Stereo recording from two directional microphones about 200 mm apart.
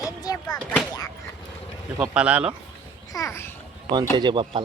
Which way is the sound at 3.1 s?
15° left (ahead or behind).